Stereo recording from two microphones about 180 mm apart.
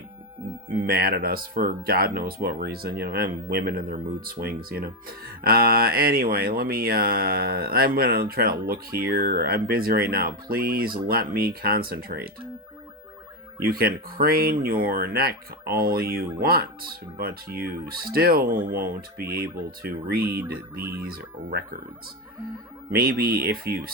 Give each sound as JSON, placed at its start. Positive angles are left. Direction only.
{"t": 0.7, "sound": "speech", "side_deg": -55}
{"t": 13.6, "sound": "speech", "side_deg": -55}
{"t": 22.9, "sound": "speech", "side_deg": -55}